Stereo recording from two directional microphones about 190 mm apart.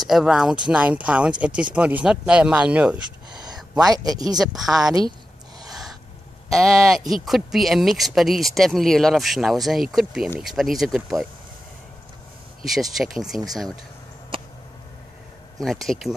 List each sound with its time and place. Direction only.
0.0 s speech: centre (ahead or behind)
3.9 s speech: 20° right (ahead or behind)
4.6 s speech: centre (ahead or behind)
6.5 s speech: centre (ahead or behind)
12.9 s speech: centre (ahead or behind)
14.3 s a sound: 25° right (ahead or behind)
15.6 s speech: centre (ahead or behind)